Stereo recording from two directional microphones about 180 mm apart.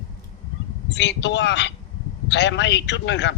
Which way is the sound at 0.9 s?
75° left (ahead or behind).